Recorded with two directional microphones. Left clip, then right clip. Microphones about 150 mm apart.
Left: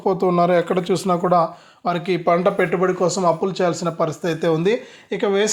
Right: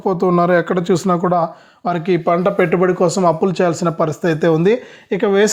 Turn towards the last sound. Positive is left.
turn(degrees=-60)  # may be behind; listen again after turning